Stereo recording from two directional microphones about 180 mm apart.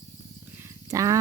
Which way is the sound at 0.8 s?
15° right (ahead or behind).